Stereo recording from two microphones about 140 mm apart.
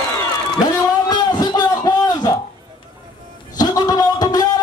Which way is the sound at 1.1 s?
30° left (ahead or behind).